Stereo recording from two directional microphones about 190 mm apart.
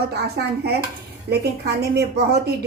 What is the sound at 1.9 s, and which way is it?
Speech, 55° right (ahead or behind).